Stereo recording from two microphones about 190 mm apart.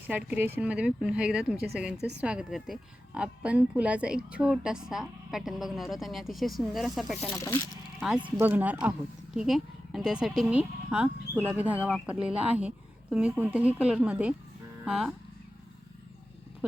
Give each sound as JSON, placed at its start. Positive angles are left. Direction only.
{"t": 0.1, "sound": "a woman's voice", "side_deg": -5}
{"t": 7.3, "sound": "speech", "side_deg": 15}
{"t": 7.9, "sound": "a woman's voice", "side_deg": 0}